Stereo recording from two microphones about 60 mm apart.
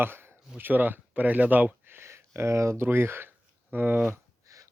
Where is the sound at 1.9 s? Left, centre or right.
Right.